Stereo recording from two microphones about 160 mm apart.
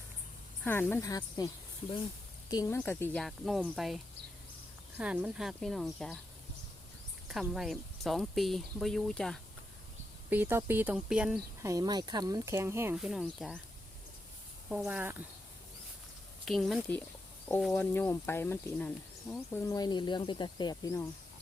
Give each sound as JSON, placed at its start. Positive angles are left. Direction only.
{"t": 0.6, "sound": "speech", "side_deg": 15}
{"t": 2.5, "sound": "speech", "side_deg": 20}
{"t": 7.3, "sound": "speech", "side_deg": -5}
{"t": 10.2, "sound": "speech", "side_deg": -15}
{"t": 11.6, "sound": "speech", "side_deg": -20}
{"t": 13.2, "sound": "speech", "side_deg": 5}
{"t": 14.7, "sound": "speech", "side_deg": -5}
{"t": 16.5, "sound": "speech", "side_deg": 0}
{"t": 17.7, "sound": "speech", "side_deg": 15}
{"t": 19.6, "sound": "speech", "side_deg": 25}